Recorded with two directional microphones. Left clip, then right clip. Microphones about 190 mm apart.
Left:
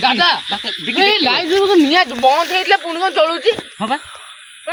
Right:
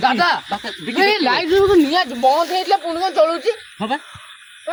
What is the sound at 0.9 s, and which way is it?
Speech, 20° left (ahead or behind).